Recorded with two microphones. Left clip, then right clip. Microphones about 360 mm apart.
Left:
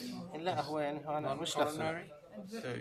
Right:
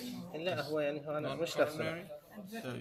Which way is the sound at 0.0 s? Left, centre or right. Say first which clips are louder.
Even; centre.